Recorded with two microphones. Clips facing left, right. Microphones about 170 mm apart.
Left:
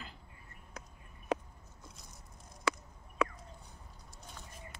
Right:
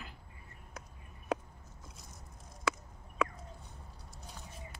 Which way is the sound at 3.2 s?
Centre (ahead or behind).